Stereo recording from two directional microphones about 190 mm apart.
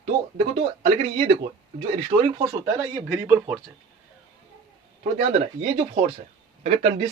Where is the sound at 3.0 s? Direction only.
15° right (ahead or behind).